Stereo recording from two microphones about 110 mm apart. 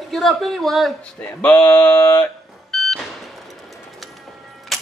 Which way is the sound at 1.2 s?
10° left (ahead or behind).